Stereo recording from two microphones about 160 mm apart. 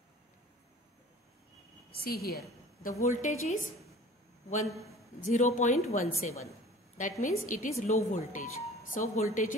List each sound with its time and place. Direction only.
2.0 s a woman's voice: 75° left (ahead or behind)
3.0 s a woman's voice: 50° left (ahead or behind)
5.2 s a woman's voice: 50° left (ahead or behind)